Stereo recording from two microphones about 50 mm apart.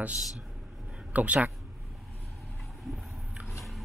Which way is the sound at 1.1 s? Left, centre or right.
Right.